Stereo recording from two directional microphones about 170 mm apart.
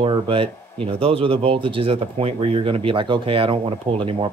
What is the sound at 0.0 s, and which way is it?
Speech, 30° right (ahead or behind).